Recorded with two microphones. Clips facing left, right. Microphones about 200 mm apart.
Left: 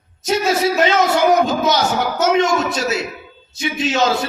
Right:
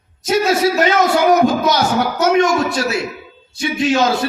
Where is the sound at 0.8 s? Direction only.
25° left (ahead or behind).